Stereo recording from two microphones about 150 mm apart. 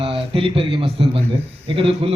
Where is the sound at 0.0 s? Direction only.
40° right (ahead or behind).